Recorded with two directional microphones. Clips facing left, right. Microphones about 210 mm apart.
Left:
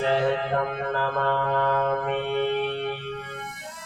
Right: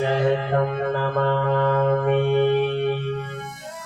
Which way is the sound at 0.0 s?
15° right (ahead or behind).